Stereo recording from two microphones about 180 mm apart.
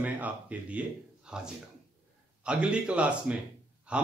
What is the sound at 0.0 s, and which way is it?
Speech, 10° right (ahead or behind).